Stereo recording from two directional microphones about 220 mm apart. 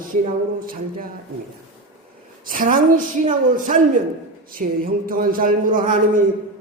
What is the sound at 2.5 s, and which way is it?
Speech, 35° right (ahead or behind).